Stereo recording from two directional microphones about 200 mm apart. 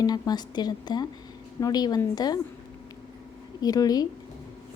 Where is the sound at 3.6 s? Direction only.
20° left (ahead or behind).